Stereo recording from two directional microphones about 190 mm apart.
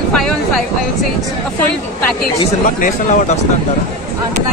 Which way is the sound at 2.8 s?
40° left (ahead or behind).